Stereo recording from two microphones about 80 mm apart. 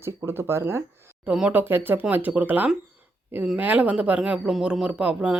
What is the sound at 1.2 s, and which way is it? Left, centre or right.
Speech, centre.